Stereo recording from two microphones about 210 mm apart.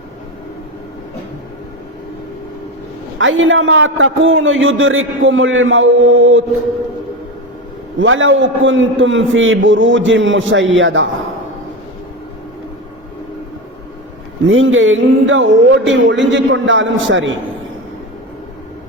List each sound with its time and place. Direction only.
3.2 s a man's voice: 65° right (ahead or behind)
7.9 s a man's voice: 65° right (ahead or behind)
14.4 s a man's voice: 65° right (ahead or behind)